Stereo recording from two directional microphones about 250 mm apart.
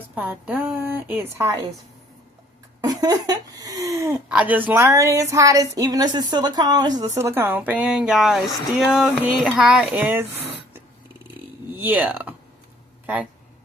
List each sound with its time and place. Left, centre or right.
0.1 s speech: centre
2.8 s speech: centre
11.8 s speech: centre